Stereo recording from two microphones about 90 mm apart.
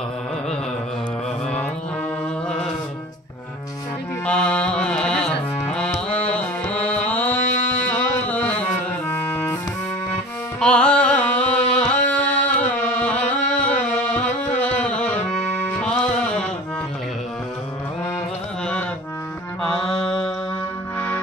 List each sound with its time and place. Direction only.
4.3 s carnatic music: 15° left (ahead or behind)
8.3 s music: 15° left (ahead or behind)
10.6 s carnatic music: 10° left (ahead or behind)
15.8 s music: 10° left (ahead or behind)
19.6 s music: 5° left (ahead or behind)